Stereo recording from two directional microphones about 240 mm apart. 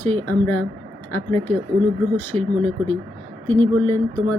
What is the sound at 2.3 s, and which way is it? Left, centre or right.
Speech, right.